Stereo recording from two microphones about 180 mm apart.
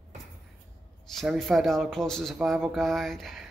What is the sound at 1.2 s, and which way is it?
Speech, centre (ahead or behind).